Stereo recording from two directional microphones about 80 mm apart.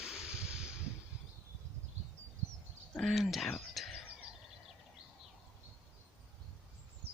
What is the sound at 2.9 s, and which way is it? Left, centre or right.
Speech, centre.